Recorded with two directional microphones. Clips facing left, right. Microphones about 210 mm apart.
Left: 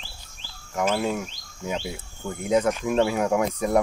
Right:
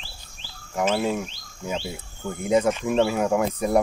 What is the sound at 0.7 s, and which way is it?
Speech, 5° right (ahead or behind).